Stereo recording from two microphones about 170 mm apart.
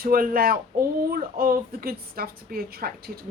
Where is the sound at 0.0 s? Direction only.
60° right (ahead or behind).